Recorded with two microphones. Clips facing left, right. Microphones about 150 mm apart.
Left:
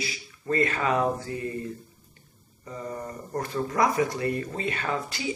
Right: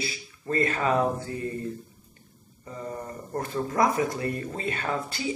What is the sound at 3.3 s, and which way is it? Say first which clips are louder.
Speech: even; 25° right (ahead or behind).